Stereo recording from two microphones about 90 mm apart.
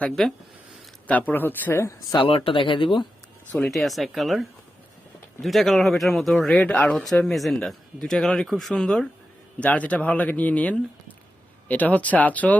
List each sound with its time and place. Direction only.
0.2 s speech: 5° left (ahead or behind)
1.0 s speech: 20° left (ahead or behind)
2.1 s speech: 90° left; by 3.1 s 65° left (ahead or behind)
3.7 s speech: centre (ahead or behind)
6.6 s speech: 15° left (ahead or behind)